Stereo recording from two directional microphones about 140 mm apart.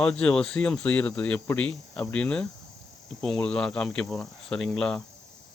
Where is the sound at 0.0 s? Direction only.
5° left (ahead or behind).